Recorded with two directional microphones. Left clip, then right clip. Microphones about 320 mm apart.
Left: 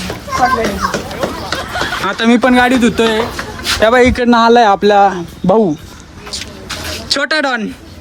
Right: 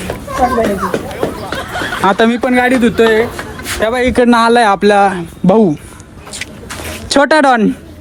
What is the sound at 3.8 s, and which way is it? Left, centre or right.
Speech, left.